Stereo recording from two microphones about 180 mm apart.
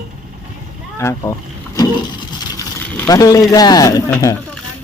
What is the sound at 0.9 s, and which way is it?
Speech, 15° left (ahead or behind).